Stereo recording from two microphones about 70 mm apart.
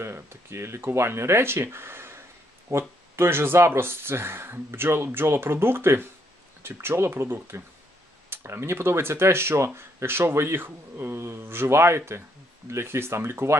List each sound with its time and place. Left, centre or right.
0.0 s speech: right